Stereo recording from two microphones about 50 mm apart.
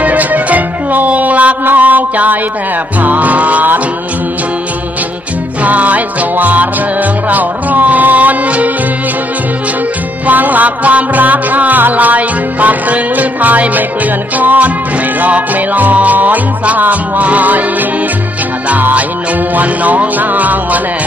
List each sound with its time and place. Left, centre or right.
0.0 s music: right
1.7 s mantra: right
3.0 s music: right
5.6 s music: right
10.2 s music: right
18.7 s music: right